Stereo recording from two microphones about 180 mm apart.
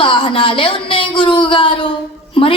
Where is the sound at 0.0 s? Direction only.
30° left (ahead or behind).